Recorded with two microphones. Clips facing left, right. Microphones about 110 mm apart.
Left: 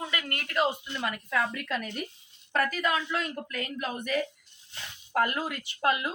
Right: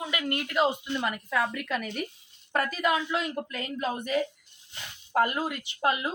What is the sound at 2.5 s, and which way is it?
A woman's voice, 15° right (ahead or behind).